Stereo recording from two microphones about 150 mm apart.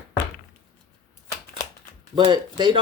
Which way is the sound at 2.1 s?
30° right (ahead or behind).